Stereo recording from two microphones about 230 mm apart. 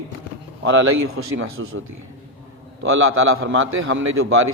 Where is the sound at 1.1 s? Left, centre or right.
Right.